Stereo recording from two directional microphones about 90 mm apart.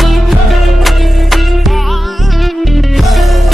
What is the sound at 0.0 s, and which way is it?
Music, centre (ahead or behind).